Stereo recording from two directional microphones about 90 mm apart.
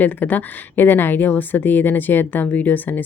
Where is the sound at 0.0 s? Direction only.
20° left (ahead or behind).